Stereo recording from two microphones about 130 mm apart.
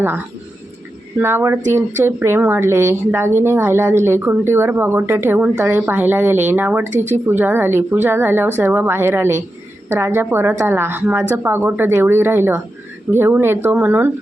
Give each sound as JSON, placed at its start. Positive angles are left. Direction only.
{"t": 1.2, "sound": "speech", "side_deg": -15}